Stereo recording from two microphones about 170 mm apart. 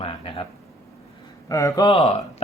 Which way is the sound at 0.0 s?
35° left (ahead or behind).